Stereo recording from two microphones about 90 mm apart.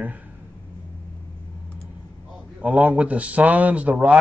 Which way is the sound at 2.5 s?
15° right (ahead or behind).